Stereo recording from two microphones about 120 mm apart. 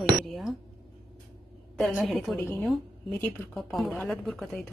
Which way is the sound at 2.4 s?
15° left (ahead or behind).